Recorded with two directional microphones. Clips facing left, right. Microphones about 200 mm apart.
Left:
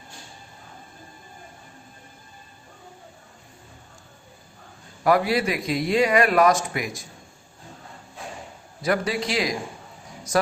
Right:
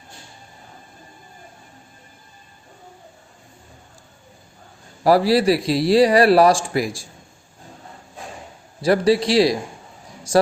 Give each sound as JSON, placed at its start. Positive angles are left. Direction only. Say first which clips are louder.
{"t": 5.0, "sound": "a man's voice", "louder": "right 6 dB", "side_deg": -35}
{"t": 8.8, "sound": "a man's voice", "louder": "right 8 dB", "side_deg": -35}